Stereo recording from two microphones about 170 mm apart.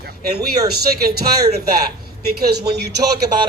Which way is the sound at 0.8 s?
65° right (ahead or behind).